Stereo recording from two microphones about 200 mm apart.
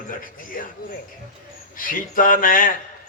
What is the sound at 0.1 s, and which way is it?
Speech, 45° left (ahead or behind).